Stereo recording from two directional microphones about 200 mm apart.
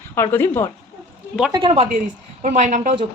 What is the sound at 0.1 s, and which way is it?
Speech, 10° left (ahead or behind).